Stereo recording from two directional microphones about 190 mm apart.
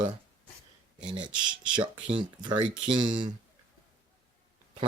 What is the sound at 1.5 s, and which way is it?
Speech, 25° right (ahead or behind).